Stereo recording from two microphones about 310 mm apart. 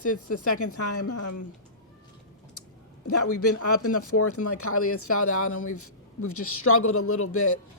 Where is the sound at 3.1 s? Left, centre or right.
Left.